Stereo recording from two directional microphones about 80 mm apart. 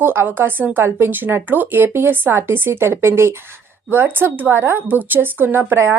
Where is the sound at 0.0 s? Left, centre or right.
Right.